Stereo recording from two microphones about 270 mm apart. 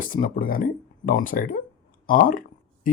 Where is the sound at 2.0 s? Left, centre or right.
Left.